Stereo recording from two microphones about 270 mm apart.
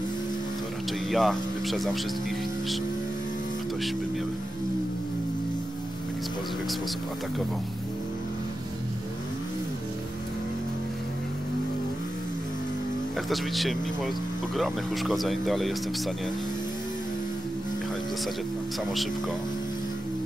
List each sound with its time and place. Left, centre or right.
1.1 s speech: centre
13.3 s speech: centre